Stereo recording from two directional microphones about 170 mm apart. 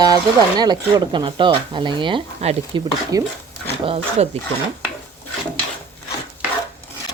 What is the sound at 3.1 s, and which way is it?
Speech, 20° right (ahead or behind).